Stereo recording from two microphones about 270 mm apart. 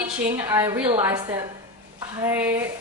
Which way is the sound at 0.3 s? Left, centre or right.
Centre.